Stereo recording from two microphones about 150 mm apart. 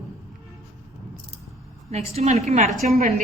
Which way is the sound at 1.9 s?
45° right (ahead or behind).